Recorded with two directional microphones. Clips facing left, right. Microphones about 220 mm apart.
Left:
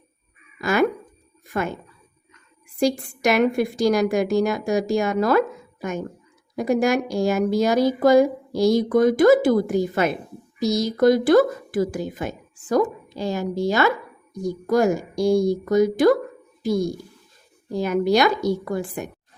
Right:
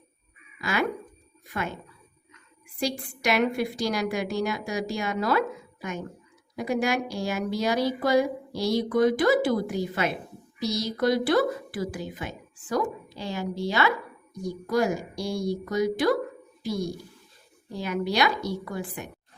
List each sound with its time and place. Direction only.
0.6 s a woman's voice: 45° left (ahead or behind)
2.7 s a woman's voice: 45° left (ahead or behind)